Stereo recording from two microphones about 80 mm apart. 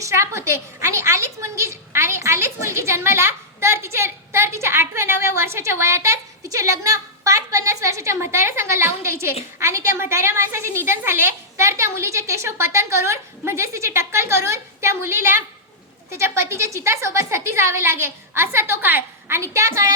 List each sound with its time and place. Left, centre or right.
0.0 s a woman's voice: right
19.4 s a woman's voice: right